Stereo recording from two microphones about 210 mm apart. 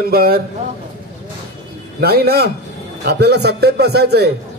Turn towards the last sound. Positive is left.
turn(degrees=-50)  # may be behind; listen again after turning